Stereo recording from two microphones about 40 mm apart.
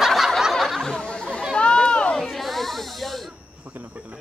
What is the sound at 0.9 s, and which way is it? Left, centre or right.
Chatter, left.